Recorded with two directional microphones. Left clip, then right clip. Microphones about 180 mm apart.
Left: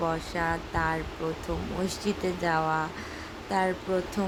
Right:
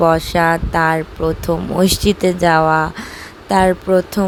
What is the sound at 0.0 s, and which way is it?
Speech, 50° right (ahead or behind).